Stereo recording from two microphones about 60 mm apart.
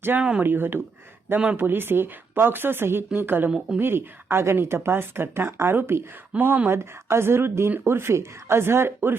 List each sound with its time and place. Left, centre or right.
0.2 s speech: centre
0.4 s speech: right
6.3 s speech: right
6.7 s speech: right